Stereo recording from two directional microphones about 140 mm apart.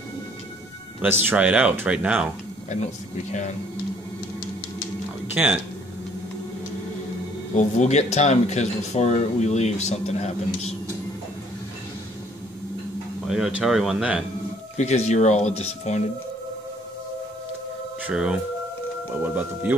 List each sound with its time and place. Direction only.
1.2 s speech: 10° right (ahead or behind)
2.7 s speech: 55° left (ahead or behind)
5.3 s speech: 10° right (ahead or behind)
7.5 s speech: 55° left (ahead or behind)
13.3 s speech: 5° right (ahead or behind)
14.8 s speech: 55° left (ahead or behind)
18.0 s speech: 5° right (ahead or behind)